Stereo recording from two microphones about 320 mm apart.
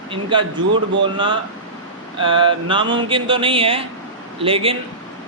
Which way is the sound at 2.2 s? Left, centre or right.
Centre.